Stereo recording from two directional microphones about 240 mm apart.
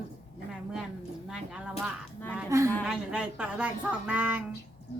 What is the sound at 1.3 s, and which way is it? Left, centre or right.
A woman's voice, centre.